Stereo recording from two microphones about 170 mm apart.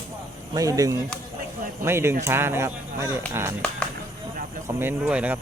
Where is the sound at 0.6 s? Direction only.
20° right (ahead or behind).